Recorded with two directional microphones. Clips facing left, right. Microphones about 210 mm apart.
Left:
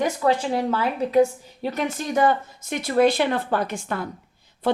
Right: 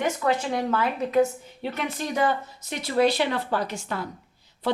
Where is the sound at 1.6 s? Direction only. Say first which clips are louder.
Left 3 dB; 45° left (ahead or behind).